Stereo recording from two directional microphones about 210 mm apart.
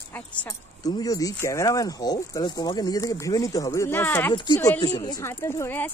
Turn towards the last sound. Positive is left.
turn(degrees=10)  # may be behind; listen again after turning